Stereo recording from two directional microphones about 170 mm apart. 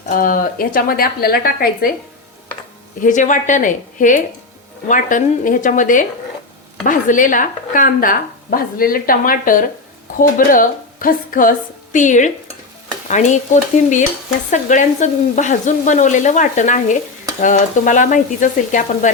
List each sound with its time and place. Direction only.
0.1 s speech: 55° left (ahead or behind)
3.0 s sizzle: 50° left (ahead or behind)
6.8 s speech: 50° left (ahead or behind)
10.2 s sizzle: 50° left (ahead or behind)